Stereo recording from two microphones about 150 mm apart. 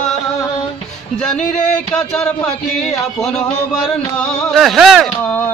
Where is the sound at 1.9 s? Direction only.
5° left (ahead or behind).